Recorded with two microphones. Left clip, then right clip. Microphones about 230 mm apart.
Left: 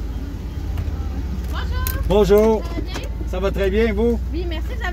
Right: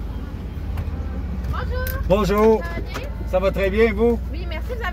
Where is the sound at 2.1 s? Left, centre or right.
Centre.